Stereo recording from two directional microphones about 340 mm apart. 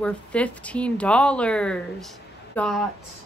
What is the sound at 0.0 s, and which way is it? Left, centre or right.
Speech, centre.